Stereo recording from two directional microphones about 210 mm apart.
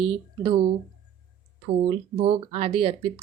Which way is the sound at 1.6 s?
30° right (ahead or behind).